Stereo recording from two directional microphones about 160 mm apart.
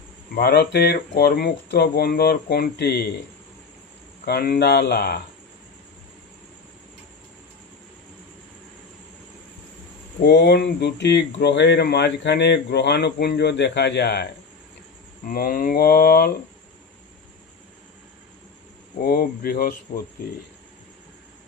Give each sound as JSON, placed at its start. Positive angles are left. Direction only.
{"t": 0.3, "sound": "speech", "side_deg": 90}
{"t": 4.3, "sound": "speech", "side_deg": 70}
{"t": 10.2, "sound": "speech", "side_deg": 90}
{"t": 15.3, "sound": "speech", "side_deg": 65}
{"t": 18.9, "sound": "speech", "side_deg": 65}